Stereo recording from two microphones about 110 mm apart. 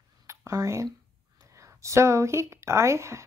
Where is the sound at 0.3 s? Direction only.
30° right (ahead or behind).